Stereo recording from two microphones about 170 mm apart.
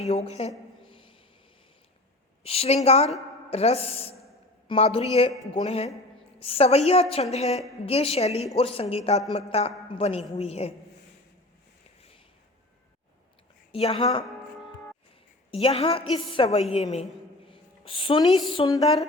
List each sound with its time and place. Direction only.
0.0 s a man's voice: 40° left (ahead or behind)
0.9 s a sound: 30° left (ahead or behind)
2.4 s a man's voice: 35° left (ahead or behind)
13.7 s a man's voice: 35° left (ahead or behind)
15.5 s a man's voice: 35° left (ahead or behind)